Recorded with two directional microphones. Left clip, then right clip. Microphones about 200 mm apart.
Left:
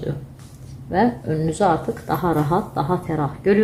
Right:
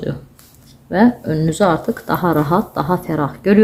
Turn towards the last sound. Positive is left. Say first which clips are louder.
# right 3 dB
turn(degrees=-30)  # may be behind; listen again after turning